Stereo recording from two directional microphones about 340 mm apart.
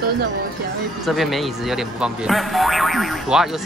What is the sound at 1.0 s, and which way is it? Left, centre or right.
Speech, centre.